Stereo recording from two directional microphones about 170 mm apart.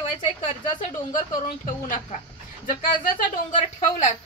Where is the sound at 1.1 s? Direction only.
50° left (ahead or behind).